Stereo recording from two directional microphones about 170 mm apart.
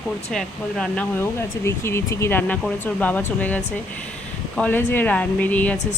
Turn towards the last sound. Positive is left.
turn(degrees=10)  # may be behind; listen again after turning